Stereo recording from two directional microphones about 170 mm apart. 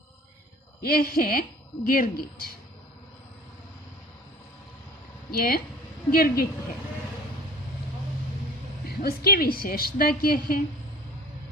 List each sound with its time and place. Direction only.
0.8 s a woman's voice: 65° left (ahead or behind)
5.3 s a woman's voice: 60° left (ahead or behind)
9.0 s a woman's voice: 60° left (ahead or behind)